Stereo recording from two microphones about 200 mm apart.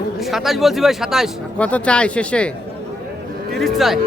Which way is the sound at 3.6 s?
Centre (ahead or behind).